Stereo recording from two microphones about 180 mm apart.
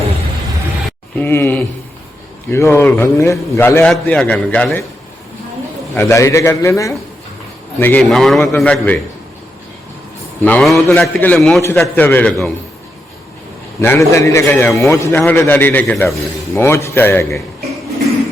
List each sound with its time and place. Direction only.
1.2 s a man's voice: 10° left (ahead or behind)
5.9 s a man's voice: 15° left (ahead or behind)
10.4 s a man's voice: 5° left (ahead or behind)
13.8 s a man's voice: 15° left (ahead or behind)